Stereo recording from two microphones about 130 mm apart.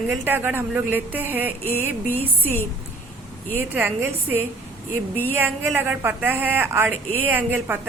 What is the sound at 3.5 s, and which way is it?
A woman's voice, 15° right (ahead or behind).